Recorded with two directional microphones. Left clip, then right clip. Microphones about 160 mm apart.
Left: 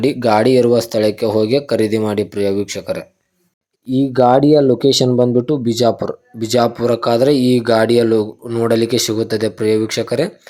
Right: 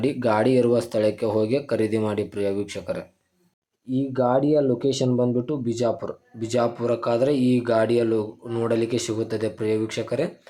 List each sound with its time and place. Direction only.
0.0 s speech: 25° left (ahead or behind)
3.8 s speech: 35° left (ahead or behind)